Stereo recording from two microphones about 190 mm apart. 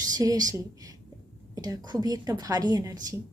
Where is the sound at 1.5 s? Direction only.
20° right (ahead or behind).